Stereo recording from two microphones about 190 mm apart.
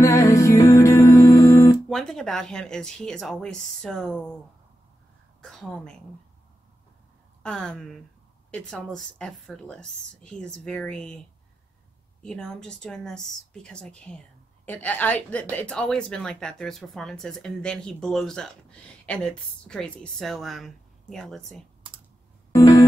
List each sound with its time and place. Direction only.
0.0 s music: 15° left (ahead or behind)
1.9 s speech: centre (ahead or behind)
5.4 s speech: centre (ahead or behind)
7.4 s speech: 5° left (ahead or behind)
12.2 s a woman's voice: 5° left (ahead or behind)
22.5 s music: 15° left (ahead or behind)